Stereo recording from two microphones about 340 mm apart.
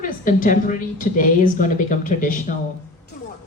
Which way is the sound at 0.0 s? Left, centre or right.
Left.